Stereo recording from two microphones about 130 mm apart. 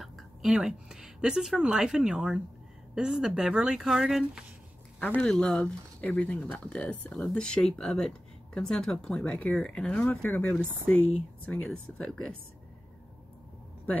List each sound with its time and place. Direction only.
0.0 s a woman's voice: 5° right (ahead or behind)
5.0 s speech: 10° left (ahead or behind)